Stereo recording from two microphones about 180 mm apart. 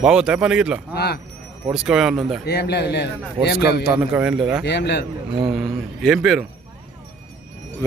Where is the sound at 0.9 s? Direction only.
65° left (ahead or behind).